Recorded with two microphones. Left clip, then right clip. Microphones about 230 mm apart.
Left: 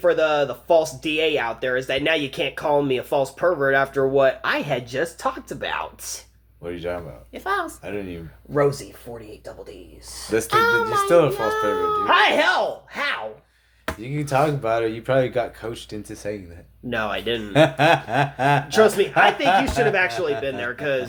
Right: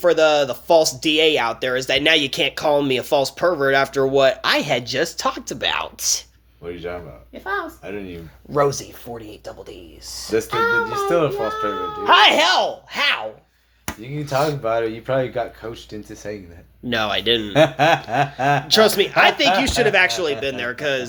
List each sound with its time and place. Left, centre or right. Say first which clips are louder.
0.0 s speech: right 3 dB; right
6.7 s speech: left 1 dB; centre
7.3 s a child's voice: left 1 dB; left
7.9 s speech: even; centre
10.5 s a child's voice: left 2 dB; left
10.8 s speech: left 2 dB; centre
12.0 s speech: right 5 dB; right
14.0 s speech: even; centre
16.9 s speech: right 5 dB; right
17.5 s speech: even; centre
18.7 s speech: right 4 dB; right